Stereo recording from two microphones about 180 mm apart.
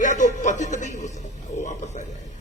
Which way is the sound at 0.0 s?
45° left (ahead or behind).